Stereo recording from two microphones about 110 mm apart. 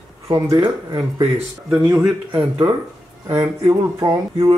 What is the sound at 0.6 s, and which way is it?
Speech, 40° right (ahead or behind).